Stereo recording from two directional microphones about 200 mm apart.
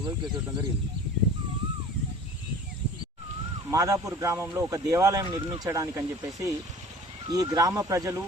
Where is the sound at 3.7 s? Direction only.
15° right (ahead or behind).